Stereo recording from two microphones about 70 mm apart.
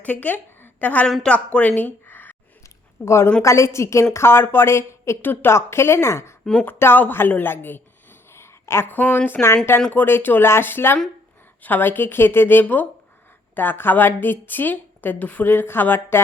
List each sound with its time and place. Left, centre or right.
0.0 s a woman's voice: left
3.0 s a woman's voice: left
5.2 s speech: left
6.4 s speech: centre
6.7 s a woman's voice: left